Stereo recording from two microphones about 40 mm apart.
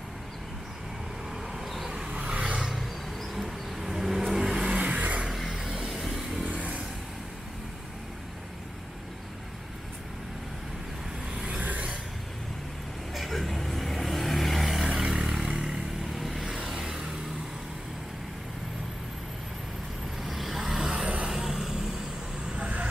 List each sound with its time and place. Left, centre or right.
1.5 s vehicle: centre
2.1 s vehicle: right
2.7 s vehicle: centre; by 4.9 s right
4.9 s vehicle: right
5.3 s music: centre
5.9 s vehicle: centre
6.4 s vehicle: right
13.1 s vehicle: centre
14.9 s vehicle: centre
16.1 s vehicle: centre
20.2 s vehicle: centre